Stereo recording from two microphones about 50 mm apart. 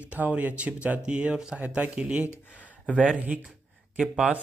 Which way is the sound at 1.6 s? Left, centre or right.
Right.